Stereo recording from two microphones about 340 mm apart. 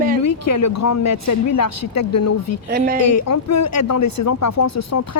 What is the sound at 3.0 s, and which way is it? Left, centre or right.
Speech, left.